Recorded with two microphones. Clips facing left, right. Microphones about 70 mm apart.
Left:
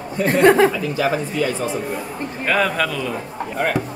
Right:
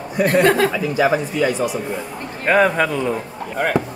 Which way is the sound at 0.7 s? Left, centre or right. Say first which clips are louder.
Right 3 dB; centre.